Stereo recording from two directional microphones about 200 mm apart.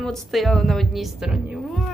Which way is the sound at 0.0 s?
Centre (ahead or behind).